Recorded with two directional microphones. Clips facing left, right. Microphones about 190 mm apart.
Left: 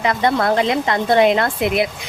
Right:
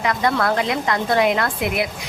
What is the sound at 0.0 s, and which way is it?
A woman's voice, 25° left (ahead or behind).